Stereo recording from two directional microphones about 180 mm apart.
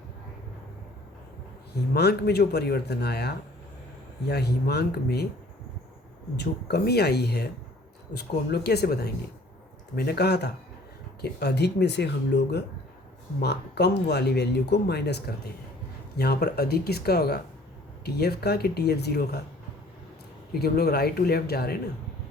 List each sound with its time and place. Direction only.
1.7 s speech: 65° left (ahead or behind)
6.3 s speech: 65° left (ahead or behind)
20.5 s speech: 60° left (ahead or behind)